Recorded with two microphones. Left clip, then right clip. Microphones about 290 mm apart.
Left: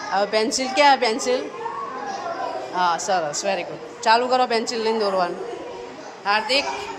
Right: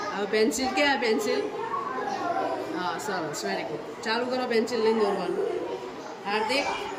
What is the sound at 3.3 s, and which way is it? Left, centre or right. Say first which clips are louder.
A man's voice: left 6 dB; centre.